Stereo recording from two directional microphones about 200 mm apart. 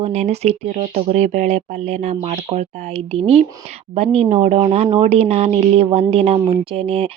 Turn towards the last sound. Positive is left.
turn(degrees=-30)  # may be behind; listen again after turning